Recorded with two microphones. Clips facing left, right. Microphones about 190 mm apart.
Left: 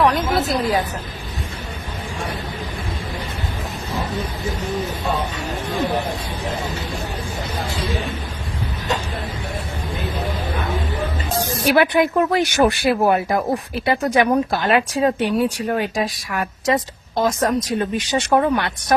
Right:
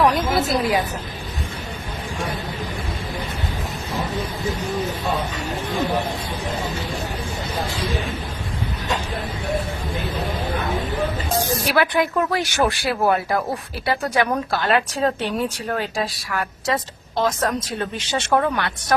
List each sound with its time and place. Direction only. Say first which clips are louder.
0.0 s a woman's voice: left 1 dB; centre (ahead or behind)
11.3 s a woman's voice: left 4 dB; 20° left (ahead or behind)